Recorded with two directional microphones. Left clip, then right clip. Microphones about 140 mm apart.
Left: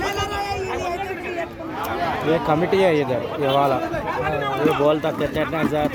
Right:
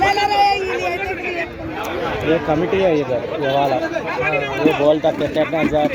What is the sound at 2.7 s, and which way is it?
Speech, 55° left (ahead or behind).